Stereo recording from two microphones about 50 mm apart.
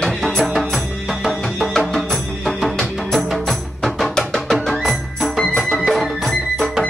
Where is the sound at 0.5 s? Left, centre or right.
Centre.